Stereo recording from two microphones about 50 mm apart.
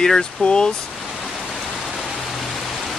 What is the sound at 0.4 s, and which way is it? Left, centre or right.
Speech, left.